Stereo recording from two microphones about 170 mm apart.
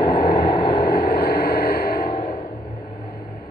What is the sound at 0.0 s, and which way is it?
Vehicle, 65° left (ahead or behind).